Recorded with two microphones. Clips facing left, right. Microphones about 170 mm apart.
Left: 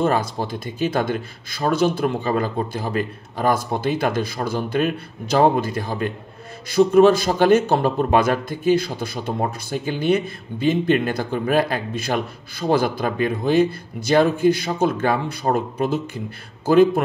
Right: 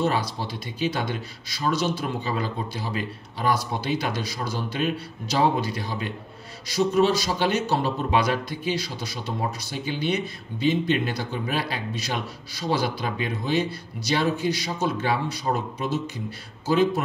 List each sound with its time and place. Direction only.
0.0 s speech: 50° left (ahead or behind)